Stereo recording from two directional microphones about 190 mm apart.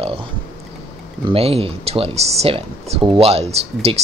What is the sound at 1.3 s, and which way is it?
Speech, 30° right (ahead or behind).